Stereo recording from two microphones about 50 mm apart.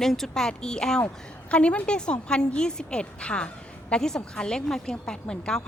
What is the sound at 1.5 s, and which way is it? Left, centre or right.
A woman's voice, left.